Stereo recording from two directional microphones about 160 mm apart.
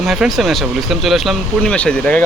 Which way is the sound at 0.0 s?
Centre (ahead or behind).